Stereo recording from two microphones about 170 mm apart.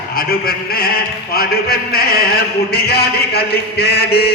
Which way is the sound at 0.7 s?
65° left (ahead or behind).